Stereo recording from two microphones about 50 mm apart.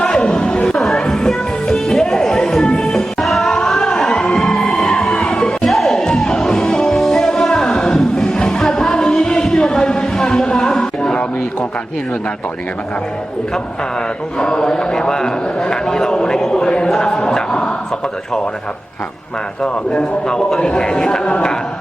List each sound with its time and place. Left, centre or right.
0.0 s chatter: centre
0.8 s music: centre
3.5 s a sound: centre
4.4 s music: centre
14.3 s a man's voice: centre
17.2 s a sound: centre
19.6 s a man's voice: centre